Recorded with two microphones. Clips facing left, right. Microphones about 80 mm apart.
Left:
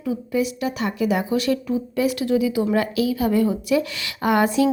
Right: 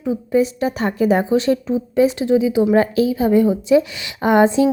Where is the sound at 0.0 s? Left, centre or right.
Right.